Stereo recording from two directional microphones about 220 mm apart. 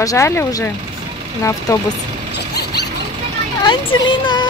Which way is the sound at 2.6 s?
45° left (ahead or behind).